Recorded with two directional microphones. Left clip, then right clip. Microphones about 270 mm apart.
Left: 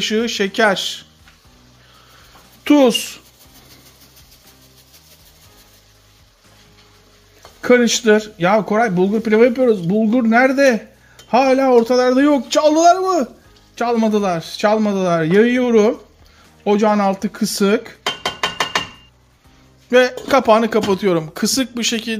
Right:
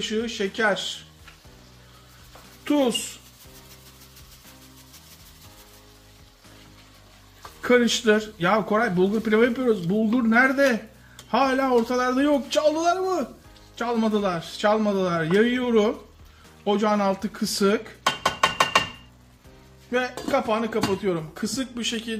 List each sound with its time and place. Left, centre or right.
0.0 s speech: left
2.6 s speech: left
7.6 s speech: left
19.9 s speech: left